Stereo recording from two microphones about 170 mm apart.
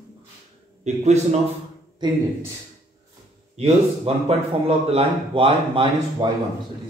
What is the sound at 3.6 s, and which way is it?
Speech, 35° right (ahead or behind).